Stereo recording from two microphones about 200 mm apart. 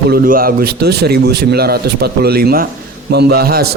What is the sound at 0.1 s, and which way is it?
A man's voice, 45° right (ahead or behind).